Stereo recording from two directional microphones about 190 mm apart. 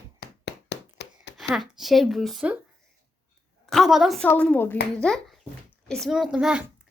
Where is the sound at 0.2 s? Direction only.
60° left (ahead or behind).